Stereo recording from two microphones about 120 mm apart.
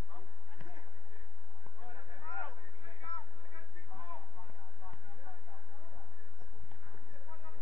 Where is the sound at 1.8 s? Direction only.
40° left (ahead or behind).